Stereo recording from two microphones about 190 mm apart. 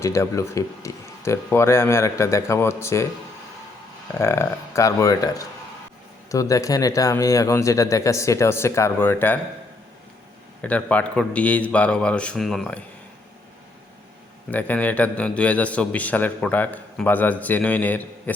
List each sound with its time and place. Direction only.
0.0 s a man's voice: 15° left (ahead or behind)
4.2 s a man's voice: 15° left (ahead or behind)
10.6 s a man's voice: 5° left (ahead or behind)
14.5 s a man's voice: 10° left (ahead or behind)